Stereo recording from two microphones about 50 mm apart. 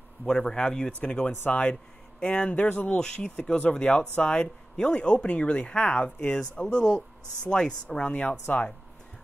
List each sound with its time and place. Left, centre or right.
0.3 s speech: centre
8.1 s speech: left